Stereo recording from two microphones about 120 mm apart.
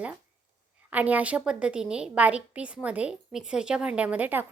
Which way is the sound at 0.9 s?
15° right (ahead or behind).